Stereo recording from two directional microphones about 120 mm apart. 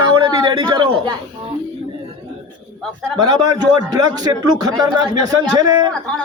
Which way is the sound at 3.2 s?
35° right (ahead or behind).